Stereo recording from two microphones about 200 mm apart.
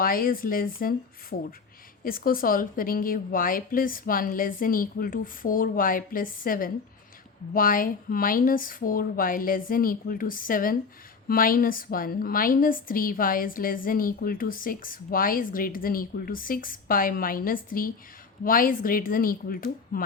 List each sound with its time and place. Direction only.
0.0 s a woman's voice: 45° left (ahead or behind)